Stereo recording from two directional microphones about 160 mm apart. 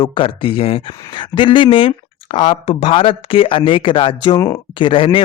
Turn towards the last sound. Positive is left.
turn(degrees=35)  # may be behind; listen again after turning